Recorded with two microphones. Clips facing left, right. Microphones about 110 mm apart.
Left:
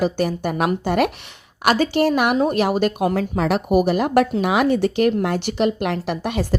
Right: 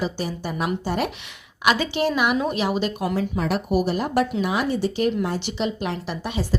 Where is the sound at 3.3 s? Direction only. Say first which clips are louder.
Left 6 dB; 85° left; by 6.4 s 60° left (ahead or behind).